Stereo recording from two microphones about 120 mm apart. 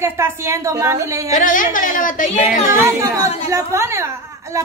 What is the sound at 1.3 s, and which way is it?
Speech, 90° left.